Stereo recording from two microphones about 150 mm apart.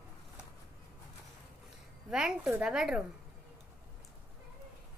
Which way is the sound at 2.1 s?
5° right (ahead or behind).